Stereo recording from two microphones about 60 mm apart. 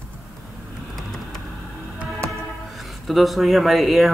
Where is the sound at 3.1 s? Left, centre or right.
Centre.